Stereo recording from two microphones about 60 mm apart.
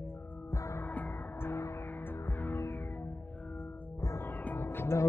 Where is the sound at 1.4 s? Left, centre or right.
Left.